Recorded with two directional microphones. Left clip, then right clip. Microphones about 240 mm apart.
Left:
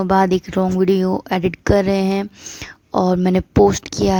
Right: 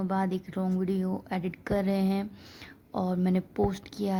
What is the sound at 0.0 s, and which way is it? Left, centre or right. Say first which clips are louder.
A woman's voice: left 16 dB; left.